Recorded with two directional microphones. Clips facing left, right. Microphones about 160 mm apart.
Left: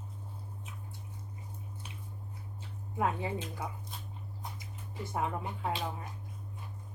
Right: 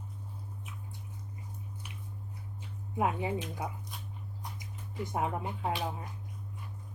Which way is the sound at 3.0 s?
20° right (ahead or behind).